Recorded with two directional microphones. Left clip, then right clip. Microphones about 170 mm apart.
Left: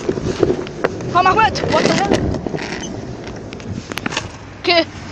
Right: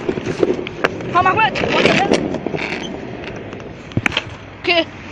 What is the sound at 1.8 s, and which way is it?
Clip-clop, 50° right (ahead or behind).